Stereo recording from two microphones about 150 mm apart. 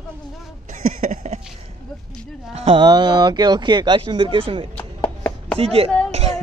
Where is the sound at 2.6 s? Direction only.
40° right (ahead or behind).